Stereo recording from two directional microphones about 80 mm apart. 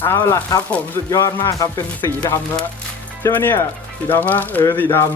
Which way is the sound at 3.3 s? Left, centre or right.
Left.